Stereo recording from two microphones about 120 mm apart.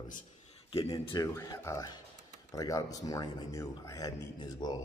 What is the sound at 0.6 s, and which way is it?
Speech, 50° left (ahead or behind).